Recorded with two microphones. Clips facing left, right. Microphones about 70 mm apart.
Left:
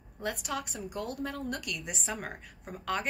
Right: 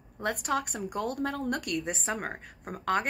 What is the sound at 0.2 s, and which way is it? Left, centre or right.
A woman's voice, right.